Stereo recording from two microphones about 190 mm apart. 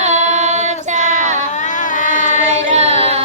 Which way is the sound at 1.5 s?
40° left (ahead or behind).